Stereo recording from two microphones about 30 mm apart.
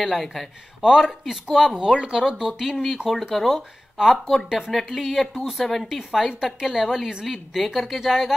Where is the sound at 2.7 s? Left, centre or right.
Centre.